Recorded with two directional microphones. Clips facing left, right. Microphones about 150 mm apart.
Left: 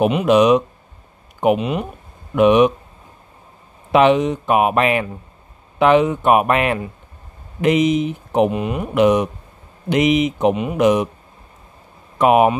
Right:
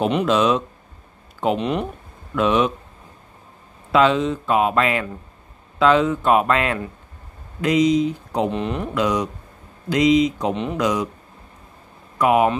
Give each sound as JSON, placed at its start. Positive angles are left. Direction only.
{"t": 0.0, "sound": "speech", "side_deg": 15}
{"t": 2.3, "sound": "speech", "side_deg": 15}
{"t": 3.9, "sound": "speech", "side_deg": 20}
{"t": 8.9, "sound": "speech", "side_deg": 20}
{"t": 10.5, "sound": "speech", "side_deg": 10}
{"t": 10.8, "sound": "speech", "side_deg": 20}
{"t": 12.2, "sound": "speech", "side_deg": 25}